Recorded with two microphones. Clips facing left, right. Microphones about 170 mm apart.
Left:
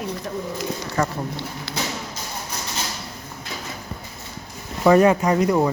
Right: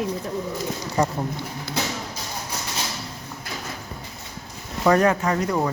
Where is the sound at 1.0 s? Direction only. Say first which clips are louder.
Right 1 dB; 15° right (ahead or behind).